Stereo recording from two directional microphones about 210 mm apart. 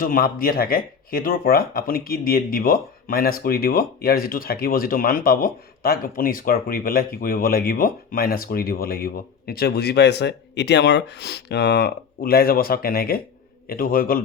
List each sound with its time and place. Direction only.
0.0 s speech: 45° left (ahead or behind)